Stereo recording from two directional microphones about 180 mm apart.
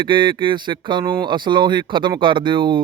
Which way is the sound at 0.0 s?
25° right (ahead or behind).